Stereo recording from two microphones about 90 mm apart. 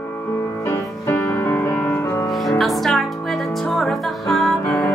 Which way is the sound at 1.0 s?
20° left (ahead or behind).